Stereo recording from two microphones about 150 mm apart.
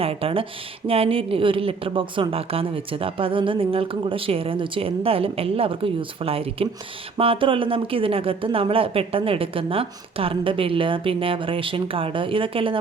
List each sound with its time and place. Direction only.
0.0 s a woman's voice: 40° right (ahead or behind)